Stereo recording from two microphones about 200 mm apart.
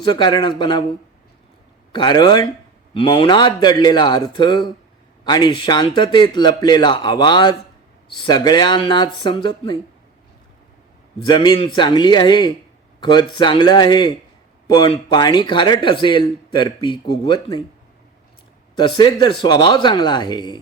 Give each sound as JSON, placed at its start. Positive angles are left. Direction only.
{"t": 0.0, "sound": "speech", "side_deg": 20}
{"t": 1.9, "sound": "speech", "side_deg": 20}
{"t": 11.3, "sound": "speech", "side_deg": 20}
{"t": 18.8, "sound": "speech", "side_deg": 25}